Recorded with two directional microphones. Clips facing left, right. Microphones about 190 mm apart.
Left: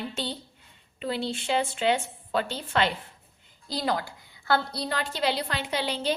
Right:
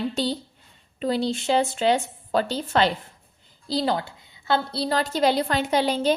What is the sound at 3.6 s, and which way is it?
A woman's voice, 30° right (ahead or behind).